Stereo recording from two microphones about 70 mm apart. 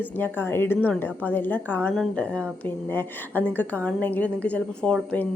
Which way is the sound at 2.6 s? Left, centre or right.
Left.